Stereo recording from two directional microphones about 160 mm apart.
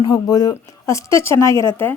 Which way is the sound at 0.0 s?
25° left (ahead or behind).